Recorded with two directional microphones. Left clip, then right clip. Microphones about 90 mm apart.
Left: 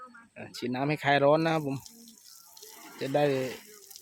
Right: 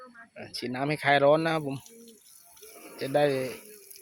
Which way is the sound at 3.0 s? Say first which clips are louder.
Right 2 dB; 40° left (ahead or behind).